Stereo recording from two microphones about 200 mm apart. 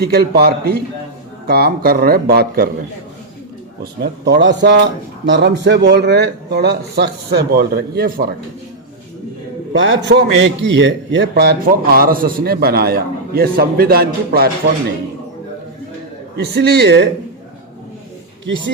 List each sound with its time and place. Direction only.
0.0 s a man's voice: 50° right (ahead or behind)
4.0 s speech: 60° right (ahead or behind)
9.7 s a man's voice: 70° right (ahead or behind); by 14.5 s 50° right (ahead or behind)
16.4 s speech: 55° right (ahead or behind)